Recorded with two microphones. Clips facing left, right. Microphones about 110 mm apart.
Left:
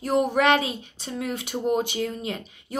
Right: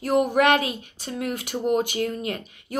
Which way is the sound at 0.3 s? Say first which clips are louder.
Right 1 dB; 45° right (ahead or behind).